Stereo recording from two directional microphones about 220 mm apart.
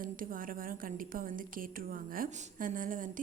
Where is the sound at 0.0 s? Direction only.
40° right (ahead or behind).